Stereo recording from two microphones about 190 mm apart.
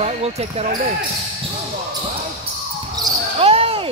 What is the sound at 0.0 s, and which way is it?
Speech, 35° right (ahead or behind).